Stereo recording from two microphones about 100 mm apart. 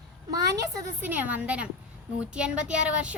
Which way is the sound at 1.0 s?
15° right (ahead or behind).